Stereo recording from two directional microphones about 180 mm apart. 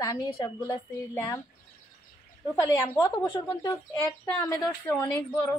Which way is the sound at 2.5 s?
15° left (ahead or behind).